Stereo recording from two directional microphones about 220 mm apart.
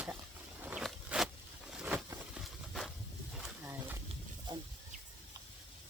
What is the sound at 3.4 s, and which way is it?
Wild animals, 10° right (ahead or behind).